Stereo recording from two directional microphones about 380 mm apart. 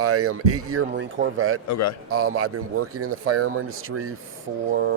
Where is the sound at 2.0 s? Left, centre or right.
Right.